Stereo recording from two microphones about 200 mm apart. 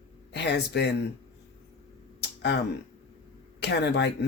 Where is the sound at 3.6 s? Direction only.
55° left (ahead or behind).